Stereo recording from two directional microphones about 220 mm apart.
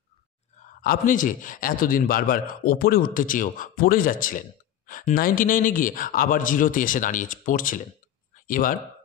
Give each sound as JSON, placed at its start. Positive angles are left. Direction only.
{"t": 0.8, "sound": "a man's voice", "side_deg": 35}